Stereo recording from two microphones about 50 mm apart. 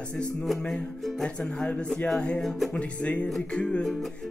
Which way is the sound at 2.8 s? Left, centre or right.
Left.